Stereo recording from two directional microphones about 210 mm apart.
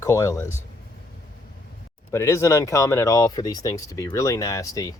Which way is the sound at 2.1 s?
15° left (ahead or behind).